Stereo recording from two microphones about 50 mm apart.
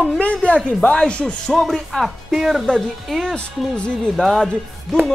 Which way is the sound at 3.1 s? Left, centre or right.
Centre.